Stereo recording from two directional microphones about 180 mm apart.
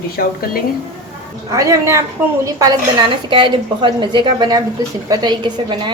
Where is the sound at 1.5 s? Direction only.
15° right (ahead or behind).